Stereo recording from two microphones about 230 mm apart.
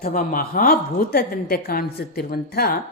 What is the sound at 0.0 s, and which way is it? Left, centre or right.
A woman's voice, left.